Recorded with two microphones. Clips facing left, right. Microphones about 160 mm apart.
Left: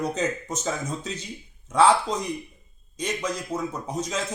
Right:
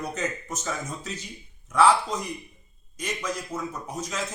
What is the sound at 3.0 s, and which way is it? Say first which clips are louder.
A man's voice: left 3 dB; 20° left (ahead or behind).